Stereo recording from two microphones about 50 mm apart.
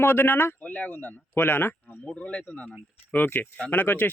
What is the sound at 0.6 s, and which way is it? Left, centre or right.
Speech, left.